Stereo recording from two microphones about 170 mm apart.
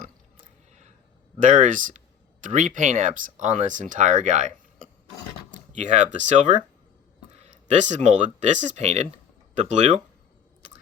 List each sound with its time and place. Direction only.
1.4 s speech: 50° right (ahead or behind)